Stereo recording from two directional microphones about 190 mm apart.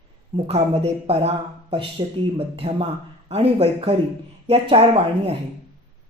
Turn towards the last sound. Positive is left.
turn(degrees=-30)  # may be behind; listen again after turning